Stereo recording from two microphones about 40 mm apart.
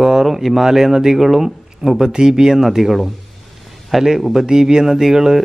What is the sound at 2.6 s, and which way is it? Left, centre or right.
Speech, centre.